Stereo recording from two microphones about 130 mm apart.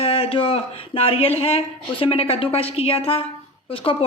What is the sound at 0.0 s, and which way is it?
A woman's voice, 45° left (ahead or behind).